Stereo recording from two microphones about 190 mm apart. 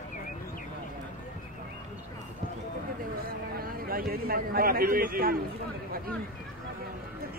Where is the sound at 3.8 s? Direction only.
50° right (ahead or behind).